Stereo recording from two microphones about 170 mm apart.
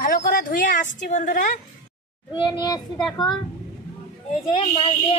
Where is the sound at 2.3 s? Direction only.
25° left (ahead or behind).